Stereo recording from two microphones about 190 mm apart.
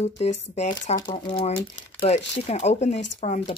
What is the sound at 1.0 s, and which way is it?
Speech, 20° left (ahead or behind).